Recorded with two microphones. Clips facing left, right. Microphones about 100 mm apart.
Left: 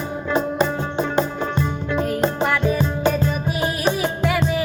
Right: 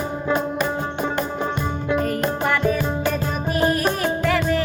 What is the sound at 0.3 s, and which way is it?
Music, 25° left (ahead or behind).